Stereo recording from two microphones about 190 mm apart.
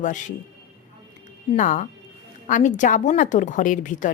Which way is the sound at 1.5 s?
40° left (ahead or behind).